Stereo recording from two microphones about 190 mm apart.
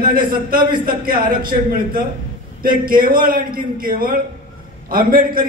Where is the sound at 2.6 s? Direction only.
50° right (ahead or behind).